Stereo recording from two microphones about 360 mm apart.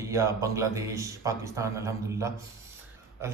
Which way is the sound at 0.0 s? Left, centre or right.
Centre.